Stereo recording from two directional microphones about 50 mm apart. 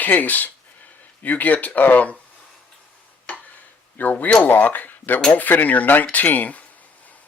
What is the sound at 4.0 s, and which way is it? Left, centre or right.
Speech, left.